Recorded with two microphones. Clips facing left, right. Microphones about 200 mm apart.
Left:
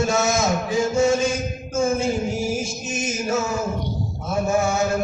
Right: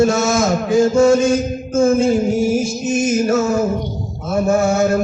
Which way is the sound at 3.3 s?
50° right (ahead or behind).